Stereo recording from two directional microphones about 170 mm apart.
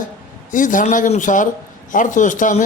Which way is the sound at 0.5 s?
50° left (ahead or behind).